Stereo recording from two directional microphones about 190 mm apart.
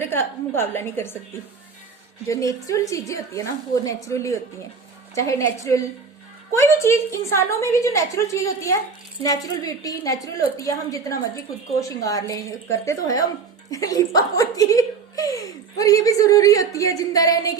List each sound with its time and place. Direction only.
0.1 s speech: 10° left (ahead or behind)
2.2 s a woman's voice: 15° left (ahead or behind)